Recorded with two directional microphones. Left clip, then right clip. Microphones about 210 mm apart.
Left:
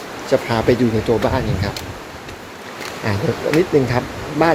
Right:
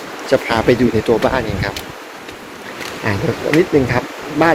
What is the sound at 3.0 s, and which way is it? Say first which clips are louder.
Speech: right 2 dB; 5° left (ahead or behind).